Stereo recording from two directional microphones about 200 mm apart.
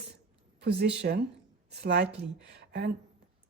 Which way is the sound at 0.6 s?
60° right (ahead or behind).